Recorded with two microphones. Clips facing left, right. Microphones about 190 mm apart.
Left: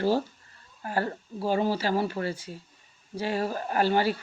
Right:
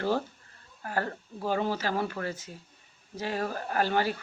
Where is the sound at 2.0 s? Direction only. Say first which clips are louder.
Left 3 dB; 25° left (ahead or behind).